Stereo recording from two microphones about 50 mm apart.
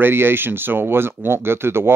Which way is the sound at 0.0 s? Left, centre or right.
Right.